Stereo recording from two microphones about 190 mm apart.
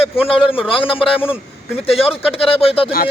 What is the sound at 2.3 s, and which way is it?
Speech, 30° left (ahead or behind).